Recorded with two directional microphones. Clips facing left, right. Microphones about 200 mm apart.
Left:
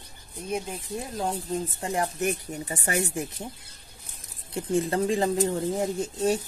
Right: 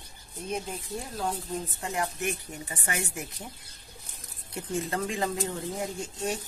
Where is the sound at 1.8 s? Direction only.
35° left (ahead or behind).